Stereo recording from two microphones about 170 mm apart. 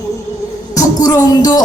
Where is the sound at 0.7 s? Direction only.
20° left (ahead or behind).